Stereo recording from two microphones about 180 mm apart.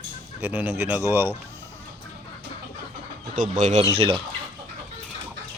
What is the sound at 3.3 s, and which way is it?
Speech, 45° right (ahead or behind).